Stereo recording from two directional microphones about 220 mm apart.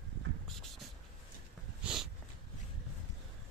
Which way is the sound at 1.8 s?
5° right (ahead or behind).